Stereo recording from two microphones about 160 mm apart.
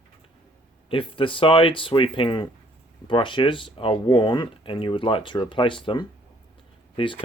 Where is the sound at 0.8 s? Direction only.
35° left (ahead or behind).